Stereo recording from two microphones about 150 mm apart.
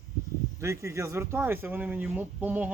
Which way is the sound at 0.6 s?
20° right (ahead or behind).